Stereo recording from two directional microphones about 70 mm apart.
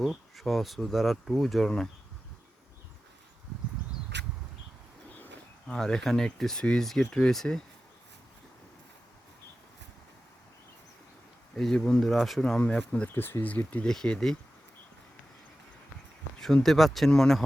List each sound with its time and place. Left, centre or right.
0.0 s speech: centre
5.6 s speech: centre
11.5 s speech: centre
13.1 s speech: left
13.5 s speech: left
13.8 s speech: centre
16.4 s speech: centre